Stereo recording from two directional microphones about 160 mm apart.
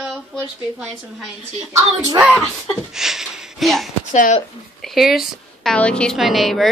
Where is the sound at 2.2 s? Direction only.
Centre (ahead or behind).